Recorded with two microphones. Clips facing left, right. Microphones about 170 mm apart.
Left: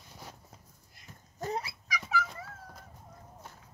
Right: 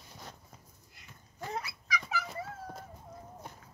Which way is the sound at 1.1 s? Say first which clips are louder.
Left 5 dB; 40° left (ahead or behind).